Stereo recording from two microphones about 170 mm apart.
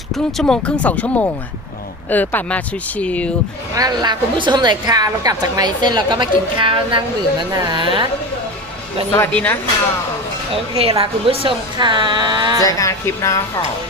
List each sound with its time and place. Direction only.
0.3 s speech: 5° left (ahead or behind)
3.8 s a woman's voice: 25° right (ahead or behind)
9.1 s speech: 10° left (ahead or behind)
10.5 s a woman's voice: 35° right (ahead or behind)
12.6 s speech: 20° left (ahead or behind)